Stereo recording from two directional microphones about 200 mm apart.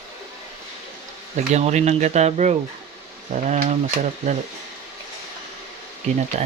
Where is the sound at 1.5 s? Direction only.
35° right (ahead or behind).